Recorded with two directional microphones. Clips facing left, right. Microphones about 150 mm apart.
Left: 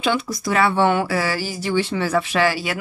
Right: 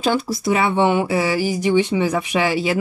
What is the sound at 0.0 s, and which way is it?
Speech, 40° right (ahead or behind).